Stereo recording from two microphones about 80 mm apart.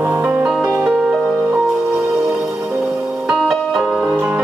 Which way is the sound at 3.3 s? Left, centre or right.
Centre.